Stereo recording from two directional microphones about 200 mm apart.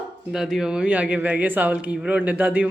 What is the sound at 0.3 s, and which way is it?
A man's voice, 5° right (ahead or behind).